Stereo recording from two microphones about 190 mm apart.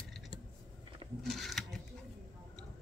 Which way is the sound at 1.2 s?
Centre (ahead or behind).